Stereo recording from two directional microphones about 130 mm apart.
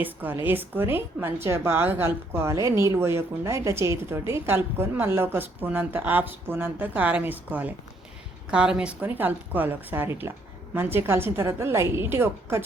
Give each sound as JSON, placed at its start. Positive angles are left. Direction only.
{"t": 0.0, "sound": "a woman's voice", "side_deg": -15}